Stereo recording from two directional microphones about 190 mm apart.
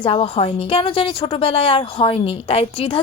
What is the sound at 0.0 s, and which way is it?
A woman's voice, 30° left (ahead or behind).